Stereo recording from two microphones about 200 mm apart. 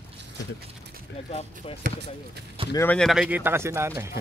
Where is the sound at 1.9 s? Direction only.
45° right (ahead or behind).